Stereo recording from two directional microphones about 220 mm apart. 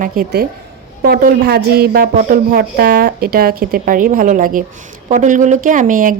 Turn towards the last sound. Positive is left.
turn(degrees=-40)  # may be behind; listen again after turning